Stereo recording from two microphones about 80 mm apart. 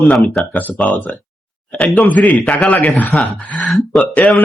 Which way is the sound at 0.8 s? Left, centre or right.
Centre.